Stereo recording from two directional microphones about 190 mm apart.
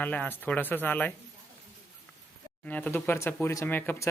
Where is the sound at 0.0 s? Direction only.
10° left (ahead or behind).